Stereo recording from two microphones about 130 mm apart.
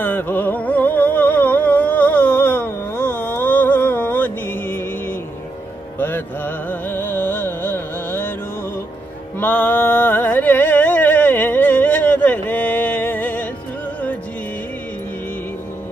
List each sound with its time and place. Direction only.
0.0 s music: 15° left (ahead or behind)
9.4 s music: 15° left (ahead or behind)